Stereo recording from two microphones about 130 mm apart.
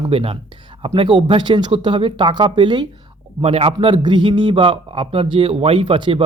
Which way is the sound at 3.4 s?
50° right (ahead or behind).